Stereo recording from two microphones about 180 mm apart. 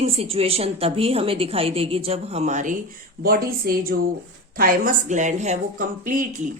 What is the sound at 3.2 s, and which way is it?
A woman's voice, 55° right (ahead or behind).